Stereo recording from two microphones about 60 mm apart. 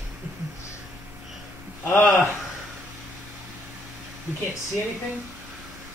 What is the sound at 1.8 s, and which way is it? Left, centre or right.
Speech, left.